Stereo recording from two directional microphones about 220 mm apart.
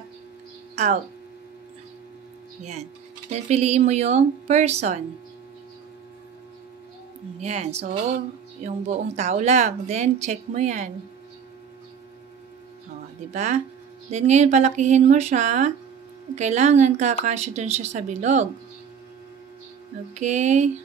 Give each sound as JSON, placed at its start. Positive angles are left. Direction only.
{"t": 2.6, "sound": "speech", "side_deg": -30}
{"t": 7.3, "sound": "speech", "side_deg": -30}
{"t": 13.3, "sound": "speech", "side_deg": -30}
{"t": 20.2, "sound": "speech", "side_deg": -30}